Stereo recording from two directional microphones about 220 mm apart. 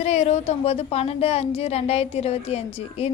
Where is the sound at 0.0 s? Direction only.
30° left (ahead or behind).